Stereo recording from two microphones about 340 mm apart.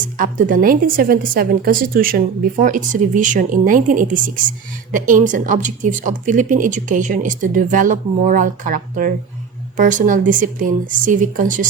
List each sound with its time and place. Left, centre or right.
0.2 s speech: right